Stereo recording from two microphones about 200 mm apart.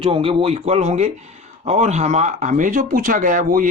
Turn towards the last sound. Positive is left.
turn(degrees=-40)  # may be behind; listen again after turning